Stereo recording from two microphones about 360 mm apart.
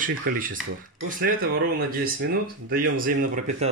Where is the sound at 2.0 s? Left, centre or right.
Right.